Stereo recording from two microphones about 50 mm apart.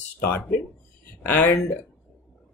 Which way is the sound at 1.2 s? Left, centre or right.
Left.